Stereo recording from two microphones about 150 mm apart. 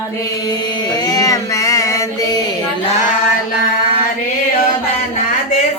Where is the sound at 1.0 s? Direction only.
25° left (ahead or behind).